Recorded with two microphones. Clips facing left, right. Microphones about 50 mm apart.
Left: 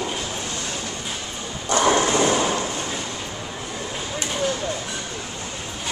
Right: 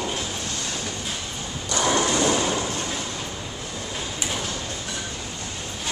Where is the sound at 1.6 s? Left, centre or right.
Left.